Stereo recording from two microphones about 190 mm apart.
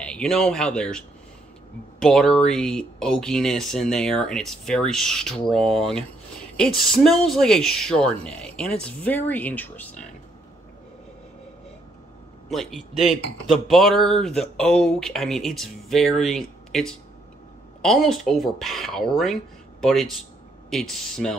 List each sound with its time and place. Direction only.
0.0 s speech: 5° left (ahead or behind)
12.4 s speech: centre (ahead or behind)